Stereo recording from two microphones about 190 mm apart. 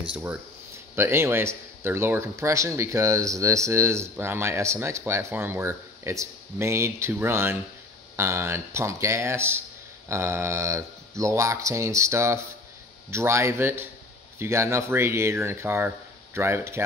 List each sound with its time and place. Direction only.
0.0 s speech: 5° right (ahead or behind)